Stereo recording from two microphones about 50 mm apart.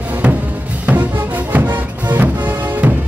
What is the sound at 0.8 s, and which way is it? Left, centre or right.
Music, right.